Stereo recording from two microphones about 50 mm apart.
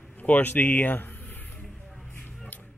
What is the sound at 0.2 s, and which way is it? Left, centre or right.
A man's voice, left.